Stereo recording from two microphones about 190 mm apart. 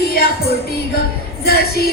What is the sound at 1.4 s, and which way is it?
Speech, 55° left (ahead or behind).